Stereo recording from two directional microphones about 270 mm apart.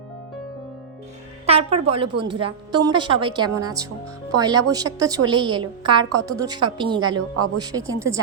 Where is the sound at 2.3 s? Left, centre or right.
Centre.